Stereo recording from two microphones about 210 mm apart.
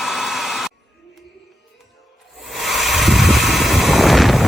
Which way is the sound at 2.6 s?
Centre (ahead or behind).